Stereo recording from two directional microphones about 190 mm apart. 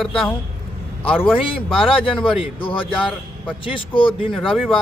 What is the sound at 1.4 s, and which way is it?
Speech, 30° left (ahead or behind).